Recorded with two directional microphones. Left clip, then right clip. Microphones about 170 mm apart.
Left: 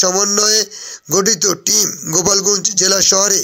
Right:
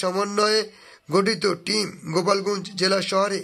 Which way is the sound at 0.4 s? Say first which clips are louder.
Left 6 dB; 30° left (ahead or behind).